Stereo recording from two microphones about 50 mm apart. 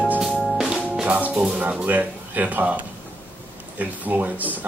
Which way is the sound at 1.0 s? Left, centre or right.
Right.